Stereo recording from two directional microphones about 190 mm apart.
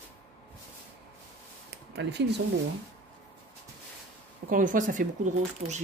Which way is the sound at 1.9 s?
65° right (ahead or behind).